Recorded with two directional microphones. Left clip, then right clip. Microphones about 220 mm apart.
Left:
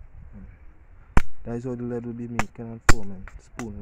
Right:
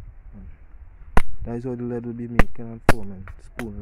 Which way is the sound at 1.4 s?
10° right (ahead or behind).